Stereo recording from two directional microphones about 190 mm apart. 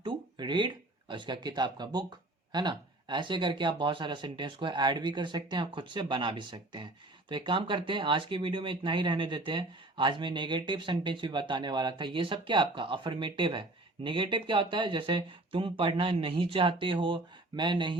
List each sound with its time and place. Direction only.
0.0 s speech: 25° right (ahead or behind)